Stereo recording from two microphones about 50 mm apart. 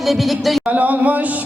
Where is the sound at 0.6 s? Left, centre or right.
Right.